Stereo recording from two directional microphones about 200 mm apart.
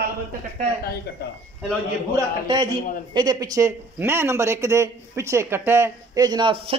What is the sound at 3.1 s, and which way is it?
Speech, 20° right (ahead or behind).